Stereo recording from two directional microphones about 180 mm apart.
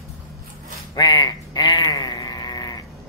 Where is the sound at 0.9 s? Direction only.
25° left (ahead or behind).